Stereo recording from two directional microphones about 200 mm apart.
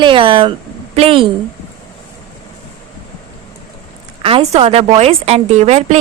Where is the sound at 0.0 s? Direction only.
25° right (ahead or behind).